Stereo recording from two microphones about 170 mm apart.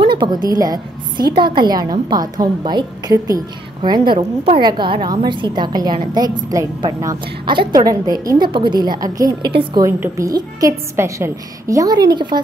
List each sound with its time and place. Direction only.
0.2 s a woman's voice: 25° right (ahead or behind)
9.8 s a woman's voice: 15° right (ahead or behind)